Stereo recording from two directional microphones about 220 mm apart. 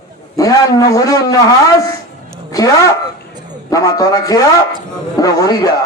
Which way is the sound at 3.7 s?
15° left (ahead or behind).